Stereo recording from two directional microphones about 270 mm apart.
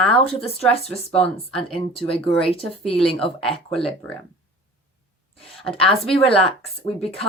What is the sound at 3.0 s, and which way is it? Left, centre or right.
A woman's voice, centre.